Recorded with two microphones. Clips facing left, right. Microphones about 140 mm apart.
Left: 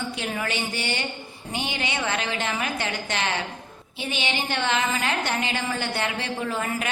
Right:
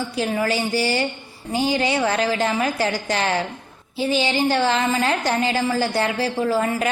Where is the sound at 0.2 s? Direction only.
35° right (ahead or behind).